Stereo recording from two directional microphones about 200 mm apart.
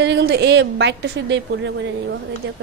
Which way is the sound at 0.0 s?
60° right (ahead or behind).